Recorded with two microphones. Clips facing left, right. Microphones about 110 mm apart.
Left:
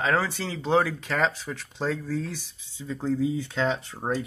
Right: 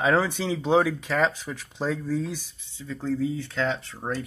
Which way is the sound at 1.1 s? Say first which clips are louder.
Right 2 dB; centre (ahead or behind).